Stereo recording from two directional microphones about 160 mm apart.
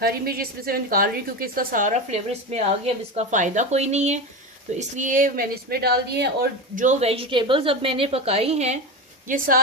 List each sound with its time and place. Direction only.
0.0 s a woman's voice: 70° right (ahead or behind); by 6.5 s 85° right
6.7 s a woman's voice: 45° right (ahead or behind)
9.2 s a woman's voice: 60° right (ahead or behind)